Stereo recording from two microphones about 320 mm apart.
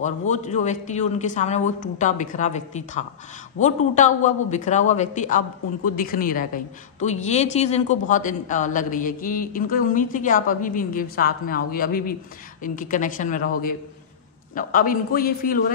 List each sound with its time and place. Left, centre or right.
0.0 s a woman's voice: left